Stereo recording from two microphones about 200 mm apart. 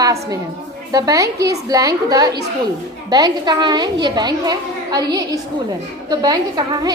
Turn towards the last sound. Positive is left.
turn(degrees=-20)  # may be behind; listen again after turning